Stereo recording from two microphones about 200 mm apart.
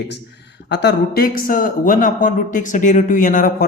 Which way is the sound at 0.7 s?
55° left (ahead or behind).